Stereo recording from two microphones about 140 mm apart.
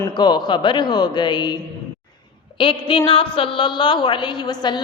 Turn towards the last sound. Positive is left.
turn(degrees=35)  # may be behind; listen again after turning